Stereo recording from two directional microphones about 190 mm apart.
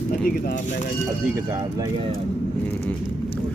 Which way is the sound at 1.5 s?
20° right (ahead or behind).